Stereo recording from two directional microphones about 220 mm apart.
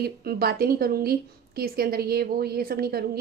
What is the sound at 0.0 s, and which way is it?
A woman's voice, 45° right (ahead or behind).